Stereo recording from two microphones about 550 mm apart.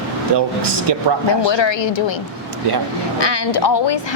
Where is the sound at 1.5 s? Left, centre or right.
Left.